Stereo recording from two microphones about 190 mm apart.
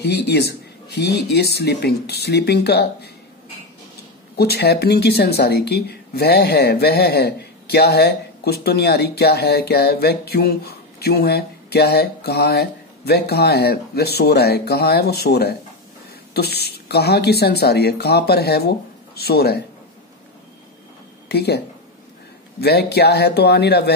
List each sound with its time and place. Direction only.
0.0 s speech: 60° left (ahead or behind)
4.4 s speech: 55° left (ahead or behind)
21.3 s speech: 60° left (ahead or behind)